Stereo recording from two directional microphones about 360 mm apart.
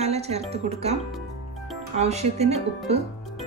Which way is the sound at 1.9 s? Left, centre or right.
Centre.